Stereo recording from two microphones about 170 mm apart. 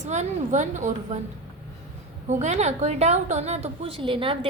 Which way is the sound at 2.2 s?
45° right (ahead or behind).